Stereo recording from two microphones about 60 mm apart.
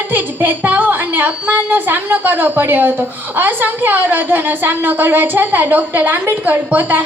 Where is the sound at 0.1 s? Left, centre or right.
Right.